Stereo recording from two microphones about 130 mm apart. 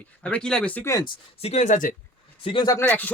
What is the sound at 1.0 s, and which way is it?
Speech, 50° left (ahead or behind).